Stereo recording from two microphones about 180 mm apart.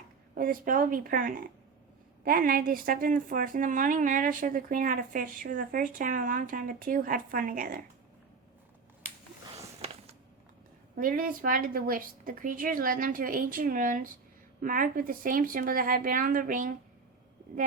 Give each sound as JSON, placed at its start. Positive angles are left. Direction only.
{"t": 0.3, "sound": "a woman's voice", "side_deg": -50}
{"t": 9.8, "sound": "a sound", "side_deg": -35}
{"t": 10.9, "sound": "a woman's voice", "side_deg": -50}